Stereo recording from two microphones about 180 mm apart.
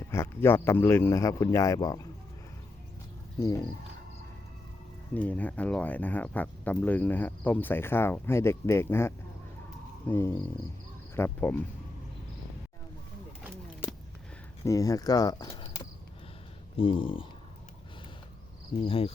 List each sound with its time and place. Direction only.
0.1 s speech: 15° left (ahead or behind)
5.1 s speech: 10° left (ahead or behind)
14.6 s speech: 20° left (ahead or behind)
18.8 s cricket: 30° left (ahead or behind)